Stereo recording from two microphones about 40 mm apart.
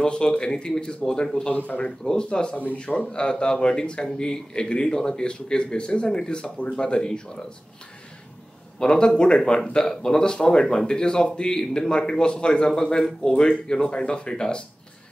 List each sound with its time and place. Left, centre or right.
0.0 s a man's voice: left
2.5 s a man's voice: left
3.1 s a man's voice: left
8.7 s a man's voice: left